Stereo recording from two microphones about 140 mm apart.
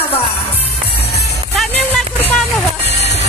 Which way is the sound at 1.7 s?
15° left (ahead or behind).